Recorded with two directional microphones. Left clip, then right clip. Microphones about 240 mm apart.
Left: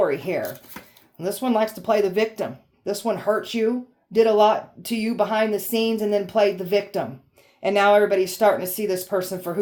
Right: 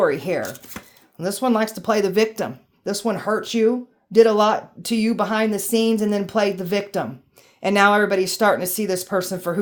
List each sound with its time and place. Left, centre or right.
0.0 s a woman's voice: right
0.4 s speech: right
1.2 s a woman's voice: right